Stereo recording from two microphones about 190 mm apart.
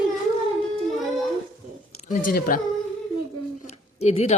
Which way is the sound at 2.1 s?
45° left (ahead or behind).